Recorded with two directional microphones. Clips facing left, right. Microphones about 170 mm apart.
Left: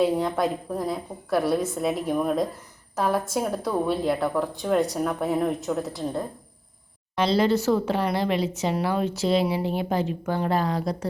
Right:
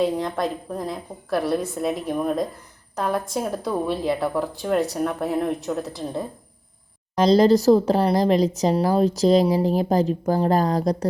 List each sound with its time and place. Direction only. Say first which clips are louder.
0.0 s speech: even; 5° left (ahead or behind)
7.2 s speech: right 6 dB; 40° right (ahead or behind)